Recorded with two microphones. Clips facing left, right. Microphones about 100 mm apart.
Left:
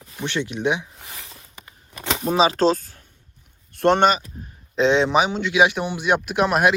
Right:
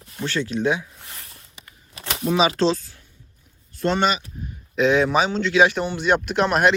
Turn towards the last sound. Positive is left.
turn(degrees=5)  # may be behind; listen again after turning